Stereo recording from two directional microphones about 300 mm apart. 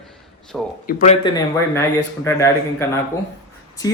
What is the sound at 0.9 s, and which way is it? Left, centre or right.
Speech, left.